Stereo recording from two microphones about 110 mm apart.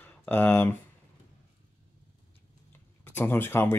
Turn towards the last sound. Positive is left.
turn(degrees=20)  # may be behind; listen again after turning